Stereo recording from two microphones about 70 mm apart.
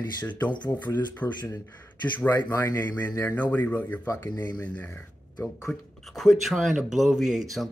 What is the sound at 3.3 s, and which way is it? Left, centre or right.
Speech, left.